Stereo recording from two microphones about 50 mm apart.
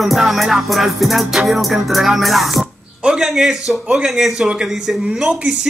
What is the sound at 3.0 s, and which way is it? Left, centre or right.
Speech, centre.